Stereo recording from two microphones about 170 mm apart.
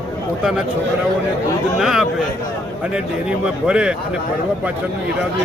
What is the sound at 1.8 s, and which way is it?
A man's voice, centre (ahead or behind).